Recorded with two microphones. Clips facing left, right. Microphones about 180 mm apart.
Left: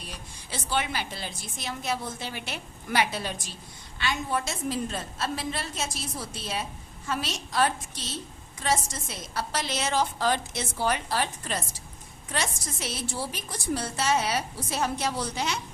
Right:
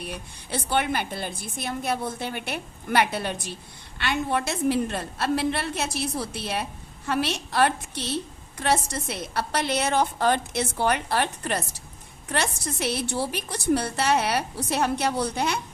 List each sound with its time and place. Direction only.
0.0 s a woman's voice: 60° right (ahead or behind)